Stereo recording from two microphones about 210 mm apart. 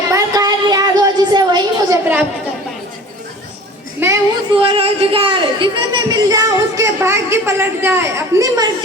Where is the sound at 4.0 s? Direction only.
55° right (ahead or behind).